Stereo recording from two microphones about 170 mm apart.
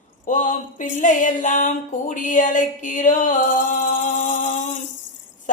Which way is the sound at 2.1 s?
50° left (ahead or behind).